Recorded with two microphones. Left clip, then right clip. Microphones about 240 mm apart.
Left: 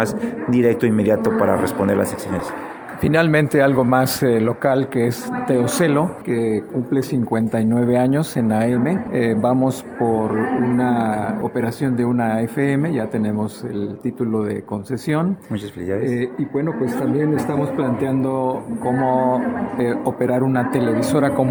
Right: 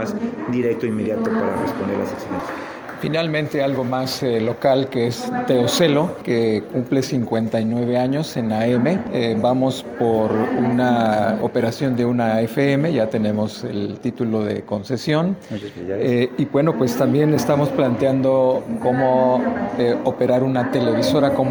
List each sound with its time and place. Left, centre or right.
0.0 s speech: left
3.0 s speech: left; by 7.2 s centre
7.3 s speech: centre
8.7 s speech: centre
9.1 s speech: centre
10.8 s speech: centre
16.0 s a man's voice: centre
18.0 s speech: centre